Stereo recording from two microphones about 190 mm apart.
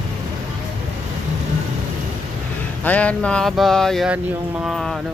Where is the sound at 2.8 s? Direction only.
5° left (ahead or behind).